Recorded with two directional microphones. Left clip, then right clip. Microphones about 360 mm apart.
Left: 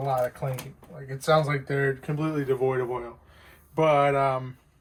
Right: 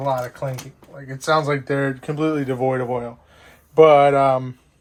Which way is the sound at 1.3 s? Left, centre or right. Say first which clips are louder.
Right 5 dB; right.